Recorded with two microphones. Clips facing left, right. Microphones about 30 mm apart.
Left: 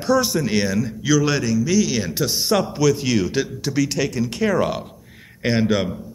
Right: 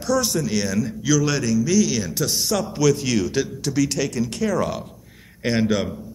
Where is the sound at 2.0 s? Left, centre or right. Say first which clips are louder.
Left 1 dB; left.